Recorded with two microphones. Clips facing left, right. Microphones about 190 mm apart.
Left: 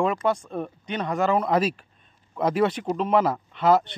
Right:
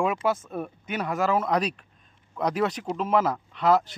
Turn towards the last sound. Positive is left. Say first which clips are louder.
# left 2 dB
turn(degrees=0)  # may be behind; listen again after turning